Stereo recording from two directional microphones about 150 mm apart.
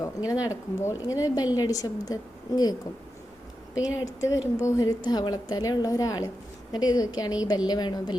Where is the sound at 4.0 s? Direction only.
20° left (ahead or behind).